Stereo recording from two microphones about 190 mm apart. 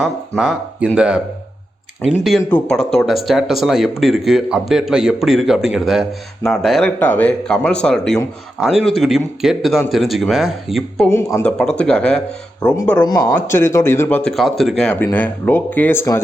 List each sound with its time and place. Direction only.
0.0 s speech: 5° right (ahead or behind)
2.4 s speech: 5° left (ahead or behind)
11.1 s speech: 15° left (ahead or behind)
13.0 s speech: 20° left (ahead or behind)
14.3 s speech: centre (ahead or behind)